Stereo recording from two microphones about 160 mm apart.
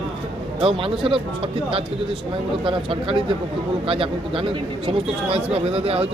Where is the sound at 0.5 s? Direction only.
35° right (ahead or behind).